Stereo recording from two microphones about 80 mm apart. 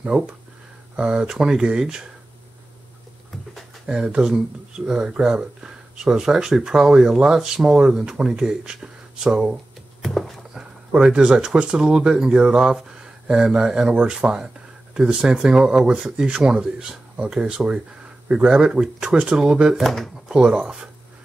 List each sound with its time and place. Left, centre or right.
0.0 s speech: centre
3.5 s speech: centre
10.0 s a sound: centre
10.5 s speech: centre
20.3 s speech: centre